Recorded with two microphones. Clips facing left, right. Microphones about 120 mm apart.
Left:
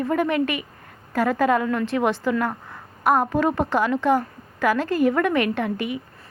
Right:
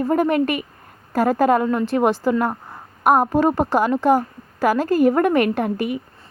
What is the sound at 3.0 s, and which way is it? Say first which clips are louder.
A woman's voice: right 4 dB; 45° right (ahead or behind).